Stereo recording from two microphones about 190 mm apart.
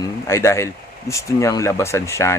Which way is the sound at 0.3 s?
15° left (ahead or behind).